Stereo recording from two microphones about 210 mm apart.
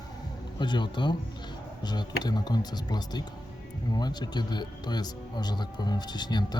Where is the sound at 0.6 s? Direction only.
20° left (ahead or behind).